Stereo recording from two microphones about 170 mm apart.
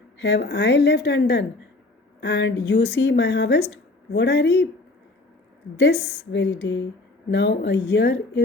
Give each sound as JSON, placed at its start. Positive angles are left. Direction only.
{"t": 0.2, "sound": "a woman's voice", "side_deg": 85}
{"t": 5.8, "sound": "a woman's voice", "side_deg": 70}